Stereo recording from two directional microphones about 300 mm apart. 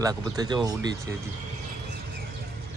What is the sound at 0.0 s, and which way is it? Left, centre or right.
Speech, centre.